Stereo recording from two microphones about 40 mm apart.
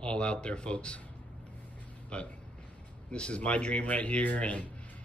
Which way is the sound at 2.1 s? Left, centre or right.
Left.